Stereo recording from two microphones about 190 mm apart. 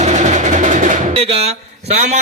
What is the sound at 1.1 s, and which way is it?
Drum, 30° right (ahead or behind).